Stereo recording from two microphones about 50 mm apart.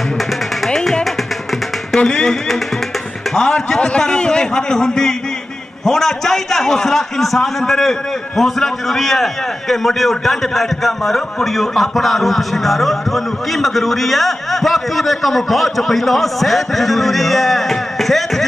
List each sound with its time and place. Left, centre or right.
0.7 s music: centre
2.0 s speech: centre
3.3 s music: centre
3.5 s a man's voice: left; by 18.4 s centre